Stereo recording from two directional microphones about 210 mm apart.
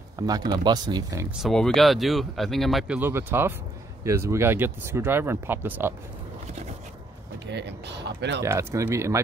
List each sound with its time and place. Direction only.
0.5 s speech: 20° right (ahead or behind)
1.3 s speech: centre (ahead or behind)
7.5 s speech: 55° right (ahead or behind)
8.4 s speech: 15° right (ahead or behind)